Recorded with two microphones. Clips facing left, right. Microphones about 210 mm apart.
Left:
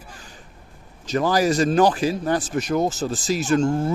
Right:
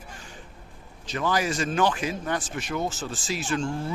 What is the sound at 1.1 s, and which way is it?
Speech, 40° left (ahead or behind).